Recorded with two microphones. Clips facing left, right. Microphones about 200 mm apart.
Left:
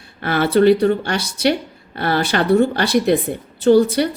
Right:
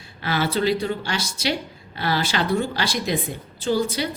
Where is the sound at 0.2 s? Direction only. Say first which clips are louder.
Left 8 dB; 55° left (ahead or behind).